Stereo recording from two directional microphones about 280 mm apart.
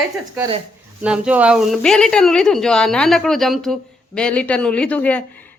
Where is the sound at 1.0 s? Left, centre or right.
Centre.